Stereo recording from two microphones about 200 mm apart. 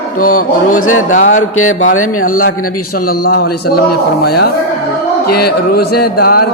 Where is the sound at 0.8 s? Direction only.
90° left.